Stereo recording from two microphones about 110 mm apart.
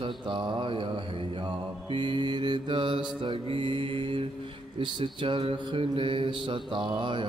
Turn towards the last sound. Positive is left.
turn(degrees=-45)  # may be behind; listen again after turning